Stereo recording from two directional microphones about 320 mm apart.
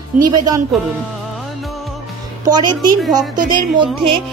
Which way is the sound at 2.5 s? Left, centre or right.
Centre.